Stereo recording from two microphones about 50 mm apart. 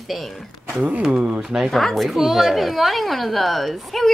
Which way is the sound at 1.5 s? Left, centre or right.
Centre.